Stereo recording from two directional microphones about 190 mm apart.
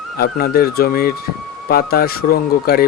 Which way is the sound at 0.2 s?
50° left (ahead or behind).